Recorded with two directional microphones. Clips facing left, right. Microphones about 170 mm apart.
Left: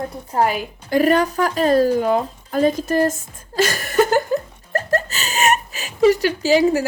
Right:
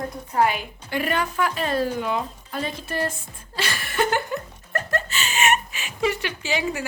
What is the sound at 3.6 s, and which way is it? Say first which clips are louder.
Laughter: left 8 dB; 45° left (ahead or behind).